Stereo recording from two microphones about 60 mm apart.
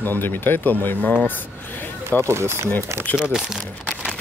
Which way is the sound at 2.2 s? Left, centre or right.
Right.